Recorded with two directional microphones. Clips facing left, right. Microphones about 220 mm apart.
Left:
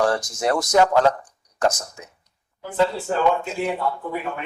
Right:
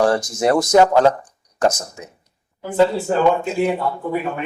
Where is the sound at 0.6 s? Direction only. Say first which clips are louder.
Right 3 dB; 25° right (ahead or behind).